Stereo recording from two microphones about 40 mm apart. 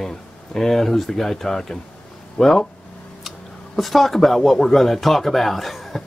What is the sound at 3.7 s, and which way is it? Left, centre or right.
Speech, centre.